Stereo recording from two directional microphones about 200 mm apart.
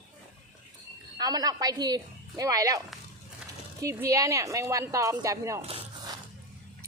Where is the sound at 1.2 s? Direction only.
20° right (ahead or behind).